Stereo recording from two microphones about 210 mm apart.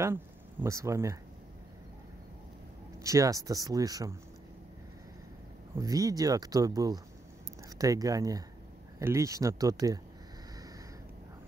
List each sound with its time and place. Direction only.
0.0 s speech: 10° right (ahead or behind)
3.0 s speech: 15° right (ahead or behind)
5.8 s speech: 15° right (ahead or behind)